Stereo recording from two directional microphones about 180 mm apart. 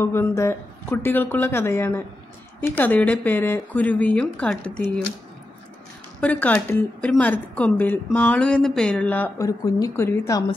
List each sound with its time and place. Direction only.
0.0 s a woman's voice: 15° left (ahead or behind)
6.2 s a woman's voice: 10° left (ahead or behind)
9.7 s a woman's voice: 20° left (ahead or behind)